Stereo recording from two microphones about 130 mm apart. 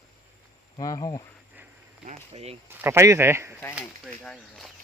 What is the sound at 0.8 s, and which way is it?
Speech, 25° left (ahead or behind).